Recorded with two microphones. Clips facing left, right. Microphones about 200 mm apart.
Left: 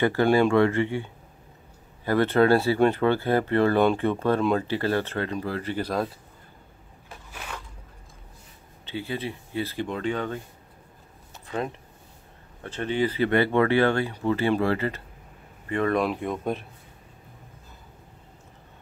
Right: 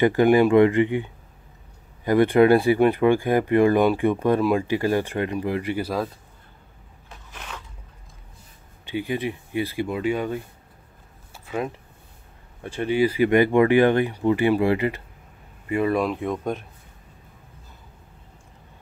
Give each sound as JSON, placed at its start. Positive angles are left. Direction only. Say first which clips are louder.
{"t": 0.0, "sound": "speech", "louder": "right 4 dB", "side_deg": -15}
{"t": 2.0, "sound": "speech", "louder": "right 4 dB", "side_deg": -15}
{"t": 7.3, "sound": "a sound", "louder": "even", "side_deg": 10}
{"t": 8.8, "sound": "speech", "louder": "right 5 dB", "side_deg": -15}
{"t": 11.3, "sound": "a sound", "louder": "right 2 dB", "side_deg": -5}
{"t": 12.6, "sound": "speech", "louder": "right 4 dB", "side_deg": -10}